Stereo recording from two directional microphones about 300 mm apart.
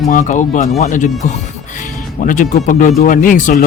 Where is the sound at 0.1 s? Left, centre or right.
Left.